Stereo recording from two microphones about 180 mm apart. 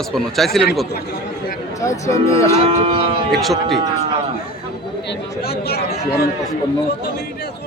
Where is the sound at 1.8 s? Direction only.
15° left (ahead or behind).